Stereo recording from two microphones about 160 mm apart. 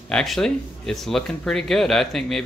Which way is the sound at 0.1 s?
5° left (ahead or behind).